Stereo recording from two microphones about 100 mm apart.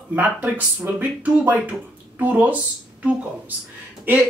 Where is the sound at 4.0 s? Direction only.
20° right (ahead or behind).